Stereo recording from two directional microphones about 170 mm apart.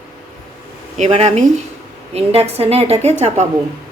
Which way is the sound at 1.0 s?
40° right (ahead or behind).